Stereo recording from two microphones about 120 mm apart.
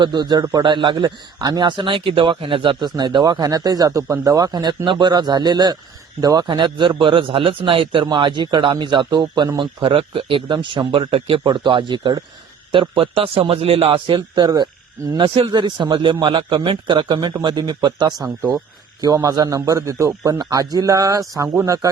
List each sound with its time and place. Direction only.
0.0 s a man's voice: 40° right (ahead or behind)